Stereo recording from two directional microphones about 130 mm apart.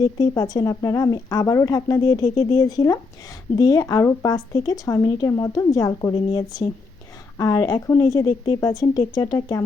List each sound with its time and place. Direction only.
0.0 s speech: 30° left (ahead or behind)